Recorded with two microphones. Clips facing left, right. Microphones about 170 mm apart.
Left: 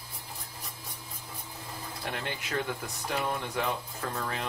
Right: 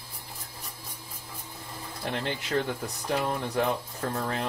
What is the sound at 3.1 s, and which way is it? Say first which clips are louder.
Speech: right 3 dB; 40° right (ahead or behind).